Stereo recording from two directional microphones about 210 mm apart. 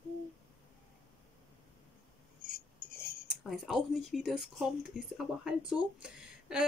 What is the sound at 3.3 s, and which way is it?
Speech, centre (ahead or behind).